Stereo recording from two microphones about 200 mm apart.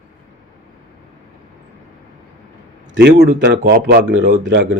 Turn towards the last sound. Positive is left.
turn(degrees=-60)  # may be behind; listen again after turning